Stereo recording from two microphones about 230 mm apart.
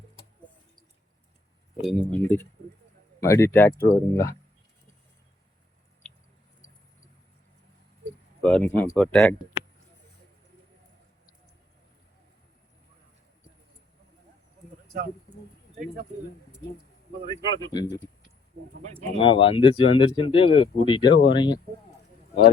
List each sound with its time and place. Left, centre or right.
1.7 s speech: centre
8.4 s speech: centre
17.2 s speech: centre
19.2 s speech: left
21.1 s speech: left
21.3 s speech: centre